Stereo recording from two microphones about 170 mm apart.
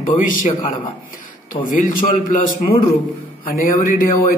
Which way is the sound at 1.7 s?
50° left (ahead or behind).